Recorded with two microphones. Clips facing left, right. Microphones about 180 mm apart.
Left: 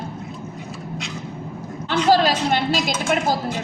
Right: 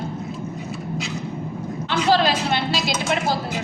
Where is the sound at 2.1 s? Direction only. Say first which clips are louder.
Left 2 dB; 45° left (ahead or behind).